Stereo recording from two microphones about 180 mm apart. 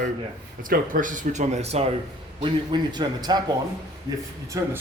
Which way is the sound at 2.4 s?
25° right (ahead or behind).